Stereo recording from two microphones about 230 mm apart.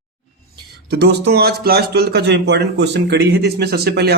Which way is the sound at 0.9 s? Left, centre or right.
Right.